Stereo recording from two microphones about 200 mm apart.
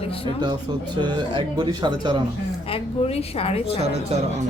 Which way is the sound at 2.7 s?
30° left (ahead or behind).